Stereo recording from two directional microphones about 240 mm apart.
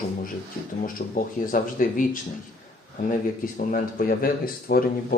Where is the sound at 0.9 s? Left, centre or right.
Left.